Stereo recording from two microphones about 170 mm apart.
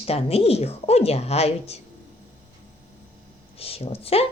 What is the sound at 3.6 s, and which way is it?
Speech, 35° left (ahead or behind).